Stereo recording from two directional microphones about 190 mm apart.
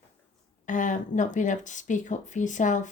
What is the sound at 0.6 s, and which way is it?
Speech, 40° left (ahead or behind).